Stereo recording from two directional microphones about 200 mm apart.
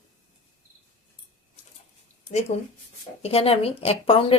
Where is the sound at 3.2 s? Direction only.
30° left (ahead or behind).